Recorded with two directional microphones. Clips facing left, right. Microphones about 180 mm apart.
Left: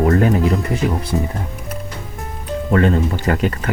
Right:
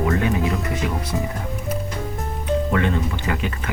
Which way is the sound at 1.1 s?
25° left (ahead or behind).